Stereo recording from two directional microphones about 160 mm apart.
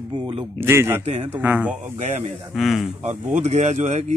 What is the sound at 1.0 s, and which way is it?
Speech, 40° right (ahead or behind).